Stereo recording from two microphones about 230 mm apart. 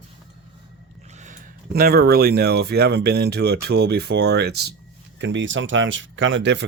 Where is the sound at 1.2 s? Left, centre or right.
Right.